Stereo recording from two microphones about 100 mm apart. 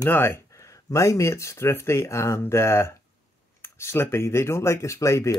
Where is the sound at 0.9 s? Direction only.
30° left (ahead or behind).